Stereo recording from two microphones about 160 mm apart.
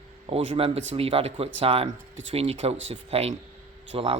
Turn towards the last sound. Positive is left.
turn(degrees=-35)  # may be behind; listen again after turning